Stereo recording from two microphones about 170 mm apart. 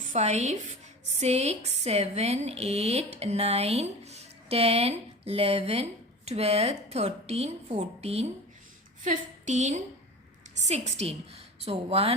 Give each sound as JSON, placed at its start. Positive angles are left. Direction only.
{"t": 0.0, "sound": "a woman's voice", "side_deg": -45}